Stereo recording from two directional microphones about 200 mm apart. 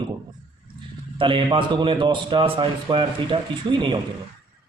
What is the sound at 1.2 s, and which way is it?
A man's voice, 25° right (ahead or behind).